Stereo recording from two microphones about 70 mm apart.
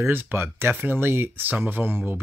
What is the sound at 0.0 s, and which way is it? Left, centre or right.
Speech, right.